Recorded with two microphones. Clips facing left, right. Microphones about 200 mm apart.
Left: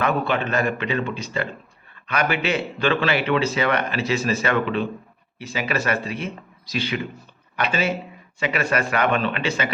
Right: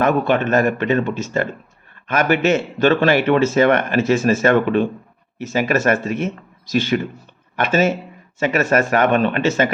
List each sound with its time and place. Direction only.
0.0 s a man's voice: 45° right (ahead or behind)